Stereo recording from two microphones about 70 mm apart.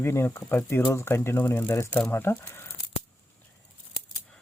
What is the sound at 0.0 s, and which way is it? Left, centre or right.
Speech, left.